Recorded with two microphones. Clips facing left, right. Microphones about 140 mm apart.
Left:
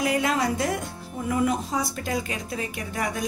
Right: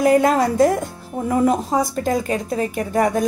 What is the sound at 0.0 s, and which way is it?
Speech, 45° right (ahead or behind).